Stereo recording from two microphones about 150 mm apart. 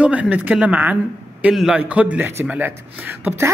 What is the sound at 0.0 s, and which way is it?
A man's voice, 10° right (ahead or behind).